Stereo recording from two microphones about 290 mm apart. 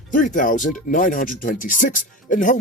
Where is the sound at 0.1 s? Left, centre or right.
Left.